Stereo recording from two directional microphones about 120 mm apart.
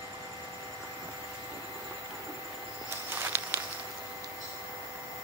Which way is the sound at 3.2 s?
20° right (ahead or behind).